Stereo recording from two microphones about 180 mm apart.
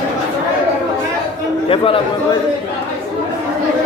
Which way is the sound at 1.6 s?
30° left (ahead or behind).